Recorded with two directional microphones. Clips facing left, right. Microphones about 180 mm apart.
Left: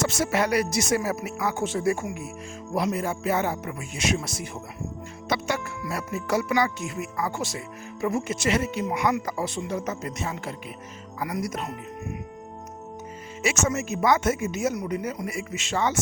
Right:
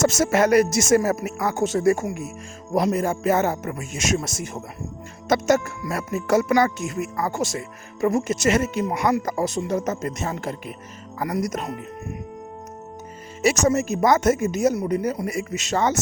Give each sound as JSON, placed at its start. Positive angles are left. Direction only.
{"t": 0.0, "sound": "speech", "side_deg": -45}
{"t": 13.4, "sound": "speech", "side_deg": -40}